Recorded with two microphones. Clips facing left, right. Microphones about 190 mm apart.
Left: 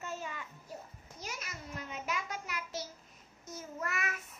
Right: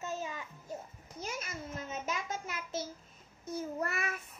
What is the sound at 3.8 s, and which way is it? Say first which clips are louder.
Child singing: right 2 dB; 30° right (ahead or behind).